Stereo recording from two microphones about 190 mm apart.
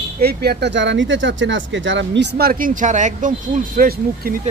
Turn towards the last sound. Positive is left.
turn(degrees=-50)  # may be behind; listen again after turning